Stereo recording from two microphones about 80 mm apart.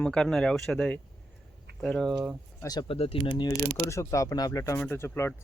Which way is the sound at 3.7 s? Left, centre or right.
Left.